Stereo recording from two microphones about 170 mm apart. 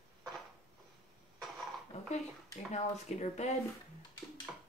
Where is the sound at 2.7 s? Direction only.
40° left (ahead or behind).